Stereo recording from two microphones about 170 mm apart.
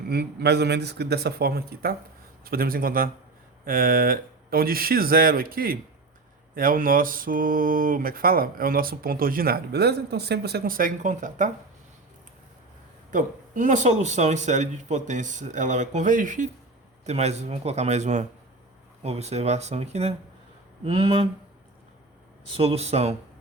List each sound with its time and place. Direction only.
0.1 s speech: 75° right (ahead or behind)
2.4 s mantra: 60° right (ahead or behind)
13.1 s a man's voice: 50° right (ahead or behind); by 21.2 s 30° right (ahead or behind)
22.5 s a man's voice: 35° right (ahead or behind)